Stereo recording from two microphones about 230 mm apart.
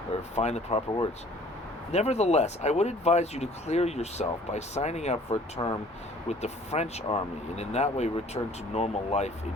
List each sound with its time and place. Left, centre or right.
0.3 s speech: left